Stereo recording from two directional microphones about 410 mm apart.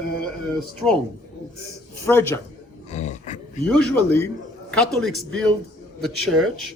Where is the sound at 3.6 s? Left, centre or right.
Centre.